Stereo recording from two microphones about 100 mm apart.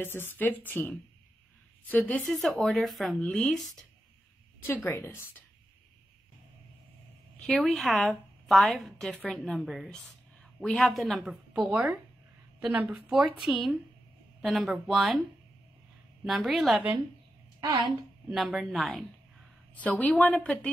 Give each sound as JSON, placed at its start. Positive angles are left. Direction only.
{"t": 0.0, "sound": "a woman's voice", "side_deg": 20}
{"t": 2.4, "sound": "a woman's voice", "side_deg": 5}
{"t": 4.6, "sound": "a woman's voice", "side_deg": 20}
{"t": 7.4, "sound": "a woman's voice", "side_deg": 0}
{"t": 12.9, "sound": "a woman's voice", "side_deg": -5}
{"t": 16.3, "sound": "a woman's voice", "side_deg": 0}
{"t": 17.6, "sound": "a woman's voice", "side_deg": -50}
{"t": 18.3, "sound": "a woman's voice", "side_deg": 0}
{"t": 19.7, "sound": "a woman's voice", "side_deg": 15}